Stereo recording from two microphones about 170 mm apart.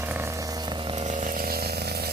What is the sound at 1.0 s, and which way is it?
Chainsaw, 45° right (ahead or behind).